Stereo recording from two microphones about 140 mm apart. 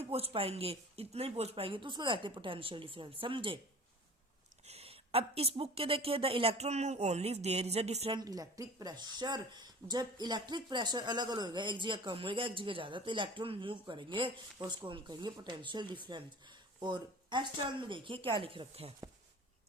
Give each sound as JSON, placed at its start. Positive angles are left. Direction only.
{"t": 0.0, "sound": "speech", "side_deg": -45}
{"t": 4.6, "sound": "a woman's voice", "side_deg": -45}
{"t": 8.1, "sound": "speech", "side_deg": -25}